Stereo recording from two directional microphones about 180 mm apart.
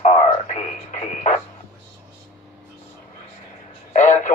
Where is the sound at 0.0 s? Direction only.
40° left (ahead or behind).